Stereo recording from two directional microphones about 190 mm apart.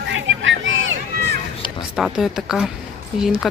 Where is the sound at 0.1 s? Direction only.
85° right.